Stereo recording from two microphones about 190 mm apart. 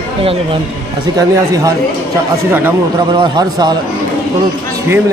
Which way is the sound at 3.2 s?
25° right (ahead or behind).